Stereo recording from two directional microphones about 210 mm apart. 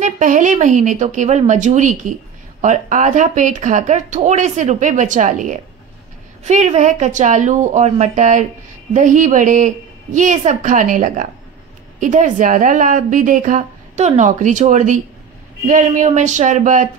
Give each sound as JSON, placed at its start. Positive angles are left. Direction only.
{"t": 0.0, "sound": "speech", "side_deg": -35}